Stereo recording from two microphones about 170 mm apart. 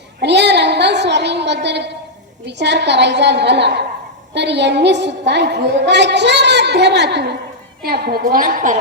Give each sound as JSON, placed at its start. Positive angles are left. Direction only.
{"t": 0.2, "sound": "a sound", "side_deg": -90}
{"t": 2.5, "sound": "a woman's voice", "side_deg": -90}
{"t": 7.8, "sound": "a woman's voice", "side_deg": -65}